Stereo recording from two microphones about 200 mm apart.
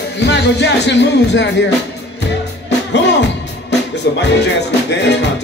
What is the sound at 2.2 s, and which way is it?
Music, 60° left (ahead or behind).